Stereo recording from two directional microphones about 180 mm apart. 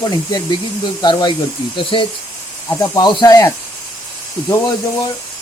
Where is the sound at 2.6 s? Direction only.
20° left (ahead or behind).